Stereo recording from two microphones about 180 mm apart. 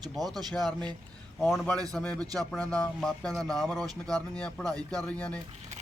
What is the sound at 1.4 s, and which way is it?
Speech, centre (ahead or behind).